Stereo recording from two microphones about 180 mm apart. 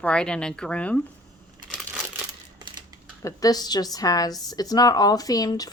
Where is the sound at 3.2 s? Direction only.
20° left (ahead or behind).